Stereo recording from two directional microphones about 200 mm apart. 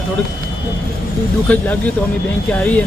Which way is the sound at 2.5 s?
10° left (ahead or behind).